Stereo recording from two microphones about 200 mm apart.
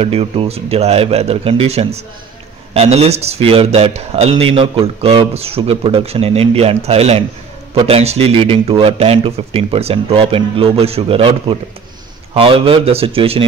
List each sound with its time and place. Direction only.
0.0 s speech: 30° right (ahead or behind)